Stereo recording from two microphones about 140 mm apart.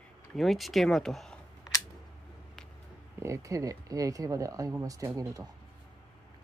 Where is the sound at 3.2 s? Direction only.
20° right (ahead or behind).